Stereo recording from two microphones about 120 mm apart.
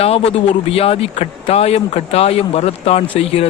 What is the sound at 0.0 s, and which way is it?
Speech, 60° left (ahead or behind).